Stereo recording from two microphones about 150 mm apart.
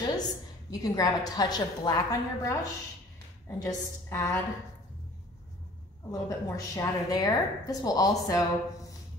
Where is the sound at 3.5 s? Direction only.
20° left (ahead or behind).